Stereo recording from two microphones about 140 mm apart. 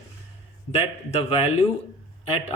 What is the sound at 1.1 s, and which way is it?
A man's voice, 45° left (ahead or behind).